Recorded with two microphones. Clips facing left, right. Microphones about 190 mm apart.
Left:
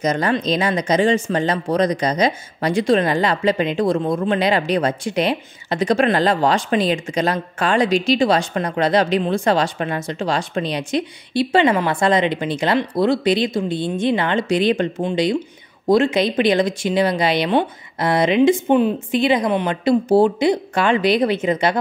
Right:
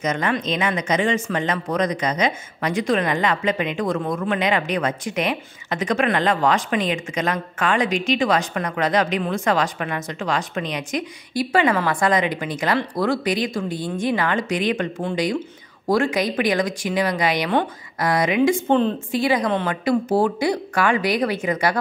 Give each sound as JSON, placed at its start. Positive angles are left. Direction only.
{"t": 0.0, "sound": "speech", "side_deg": 35}
{"t": 18.7, "sound": "speech", "side_deg": 15}